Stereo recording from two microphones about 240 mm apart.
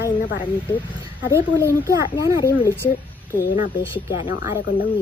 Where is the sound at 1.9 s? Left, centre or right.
Centre.